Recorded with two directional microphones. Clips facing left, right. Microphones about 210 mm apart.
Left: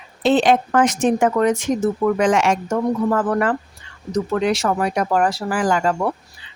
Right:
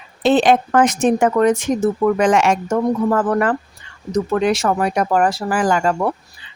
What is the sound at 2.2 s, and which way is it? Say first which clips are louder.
Speech: right 2 dB; 55° right (ahead or behind).